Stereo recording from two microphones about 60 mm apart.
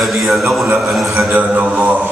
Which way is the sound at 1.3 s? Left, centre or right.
Right.